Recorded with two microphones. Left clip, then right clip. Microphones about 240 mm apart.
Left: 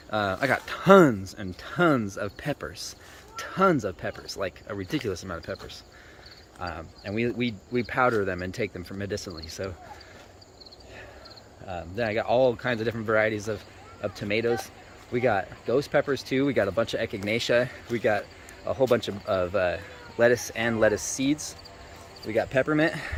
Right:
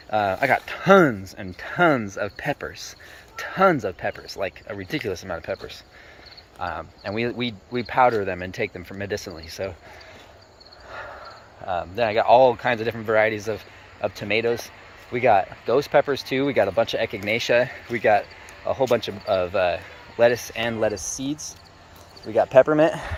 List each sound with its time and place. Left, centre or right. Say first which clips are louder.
0.1 s speech: right 5 dB; centre
11.6 s speech: right 7 dB; centre
21.0 s speech: left 2 dB; left
22.6 s speech: right 6 dB; centre